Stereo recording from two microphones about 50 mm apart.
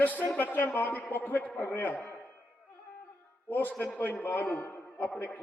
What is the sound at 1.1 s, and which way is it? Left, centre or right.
Speech, left.